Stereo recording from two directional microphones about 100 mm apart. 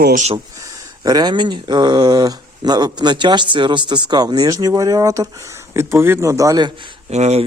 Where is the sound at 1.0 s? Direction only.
45° right (ahead or behind).